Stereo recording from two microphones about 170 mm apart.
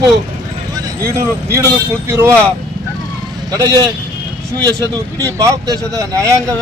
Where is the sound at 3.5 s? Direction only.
25° right (ahead or behind).